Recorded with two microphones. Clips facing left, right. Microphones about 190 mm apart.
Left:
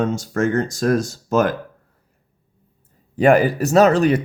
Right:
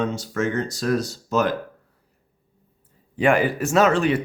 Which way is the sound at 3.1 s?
40° left (ahead or behind).